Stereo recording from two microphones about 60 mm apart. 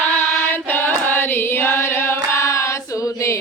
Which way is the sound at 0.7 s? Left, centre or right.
Left.